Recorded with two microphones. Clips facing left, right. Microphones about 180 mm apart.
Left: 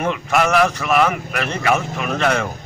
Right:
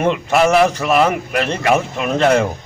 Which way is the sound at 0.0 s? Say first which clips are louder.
Right 4 dB; 25° right (ahead or behind).